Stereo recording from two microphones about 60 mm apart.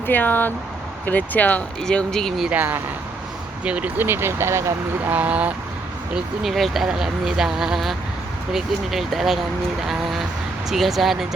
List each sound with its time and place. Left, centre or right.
0.1 s speech: left
1.8 s speech: centre
2.5 s speech: right
3.6 s speech: right
4.0 s speech: right
5.0 s speech: right
6.4 s speech: centre